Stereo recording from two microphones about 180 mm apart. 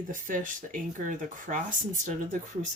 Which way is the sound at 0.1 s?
45° right (ahead or behind).